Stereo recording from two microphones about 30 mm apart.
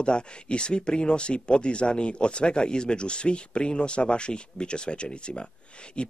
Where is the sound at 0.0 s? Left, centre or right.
Left.